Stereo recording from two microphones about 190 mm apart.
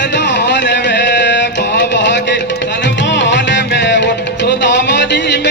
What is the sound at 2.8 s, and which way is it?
Music, 70° left (ahead or behind).